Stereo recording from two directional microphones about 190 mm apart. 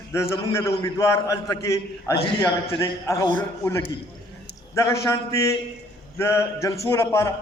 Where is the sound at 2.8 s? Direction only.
15° left (ahead or behind).